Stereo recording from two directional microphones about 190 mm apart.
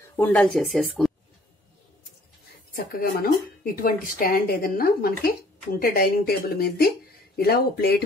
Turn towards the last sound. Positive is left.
turn(degrees=55)  # may be behind; listen again after turning